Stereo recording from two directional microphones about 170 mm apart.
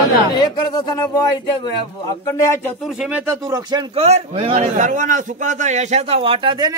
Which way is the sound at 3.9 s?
35° right (ahead or behind).